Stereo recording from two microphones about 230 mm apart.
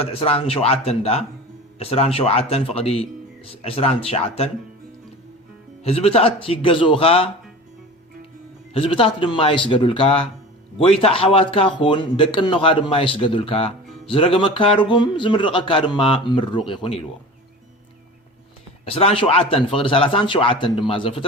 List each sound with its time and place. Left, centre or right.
0.0 s a man's voice: left
5.8 s a man's voice: left
8.7 s a man's voice: left
18.9 s a man's voice: left